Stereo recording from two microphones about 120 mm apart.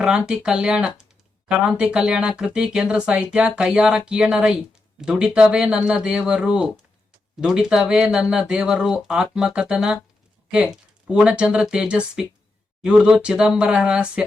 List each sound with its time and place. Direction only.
0.0 s speech: 5° right (ahead or behind)
11.1 s speech: 10° right (ahead or behind)